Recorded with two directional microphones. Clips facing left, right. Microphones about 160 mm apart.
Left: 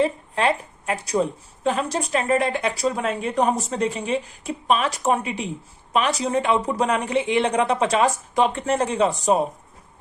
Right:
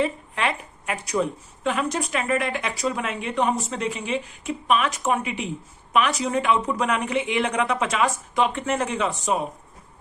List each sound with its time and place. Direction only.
0.0 s a woman's voice: 35° left (ahead or behind)